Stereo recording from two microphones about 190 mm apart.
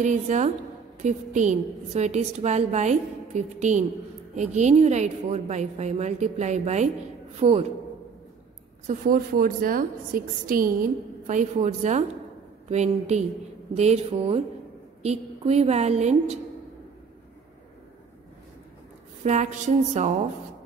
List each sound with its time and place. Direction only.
0.0 s a woman's voice: 40° right (ahead or behind)
8.8 s a woman's voice: 45° right (ahead or behind)
19.2 s a woman's voice: 40° right (ahead or behind)